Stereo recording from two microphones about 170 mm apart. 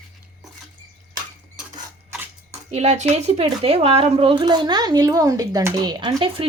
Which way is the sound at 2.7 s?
40° right (ahead or behind).